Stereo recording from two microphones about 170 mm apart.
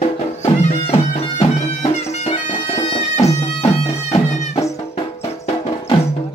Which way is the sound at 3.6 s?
35° left (ahead or behind).